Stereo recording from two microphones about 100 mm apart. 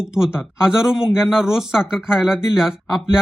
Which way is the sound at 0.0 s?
5° right (ahead or behind).